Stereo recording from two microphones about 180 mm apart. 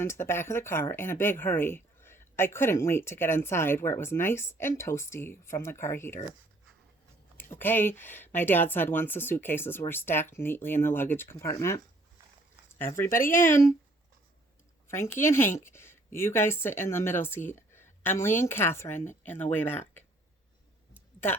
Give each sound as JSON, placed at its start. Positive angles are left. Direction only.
{"t": 0.0, "sound": "speech", "side_deg": 15}
{"t": 7.3, "sound": "speech", "side_deg": 10}
{"t": 12.8, "sound": "speech", "side_deg": 15}
{"t": 13.1, "sound": "speech", "side_deg": 50}
{"t": 13.4, "sound": "speech", "side_deg": 15}
{"t": 14.8, "sound": "speech", "side_deg": 15}
{"t": 20.9, "sound": "a sound", "side_deg": 10}